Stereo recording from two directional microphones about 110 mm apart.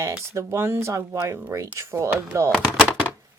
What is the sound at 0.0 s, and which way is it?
Speech, 25° right (ahead or behind).